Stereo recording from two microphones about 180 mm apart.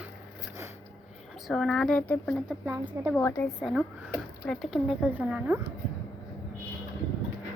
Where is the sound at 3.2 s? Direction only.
10° left (ahead or behind).